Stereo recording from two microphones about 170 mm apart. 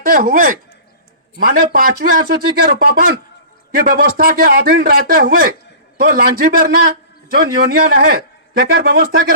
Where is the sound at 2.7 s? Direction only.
65° right (ahead or behind).